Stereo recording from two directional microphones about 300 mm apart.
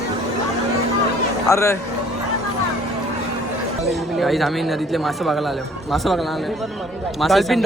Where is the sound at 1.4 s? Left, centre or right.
Centre.